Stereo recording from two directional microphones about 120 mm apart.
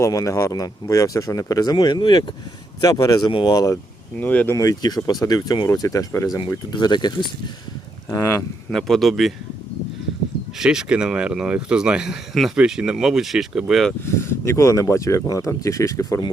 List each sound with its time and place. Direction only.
0.0 s speech: 25° left (ahead or behind)
4.2 s speech: 15° left (ahead or behind)
4.5 s speech: 30° left (ahead or behind)
8.1 s speech: 20° left (ahead or behind)
8.7 s speech: centre (ahead or behind)
10.6 s speech: 5° right (ahead or behind)
14.0 s speech: 20° left (ahead or behind)